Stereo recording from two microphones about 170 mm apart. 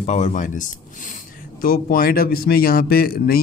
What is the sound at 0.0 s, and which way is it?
A man's voice, 45° left (ahead or behind).